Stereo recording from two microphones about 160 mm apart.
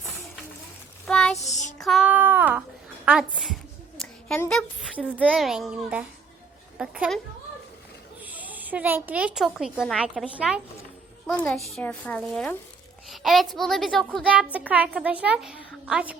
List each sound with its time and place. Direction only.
1.0 s child singing: 5° left (ahead or behind)
1.8 s a sound: centre (ahead or behind)
4.4 s a child's voice: 5° left (ahead or behind)
8.2 s a woman's voice: 10° right (ahead or behind)
11.3 s a child's voice: 10° left (ahead or behind)
14.7 s a woman's voice: 10° right (ahead or behind)